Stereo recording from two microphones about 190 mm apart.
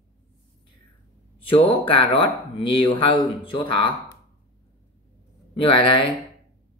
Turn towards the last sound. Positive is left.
turn(degrees=25)  # may be behind; listen again after turning